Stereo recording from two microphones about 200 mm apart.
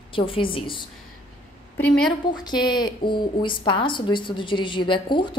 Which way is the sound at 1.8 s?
5° left (ahead or behind).